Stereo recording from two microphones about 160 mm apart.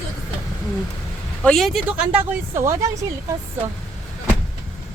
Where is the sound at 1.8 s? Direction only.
10° right (ahead or behind).